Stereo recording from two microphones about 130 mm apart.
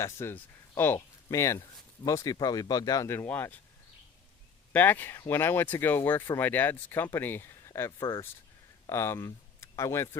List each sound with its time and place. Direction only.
0.0 s speech: 20° left (ahead or behind)
4.7 s speech: 15° left (ahead or behind)